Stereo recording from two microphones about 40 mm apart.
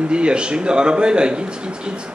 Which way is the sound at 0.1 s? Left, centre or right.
Right.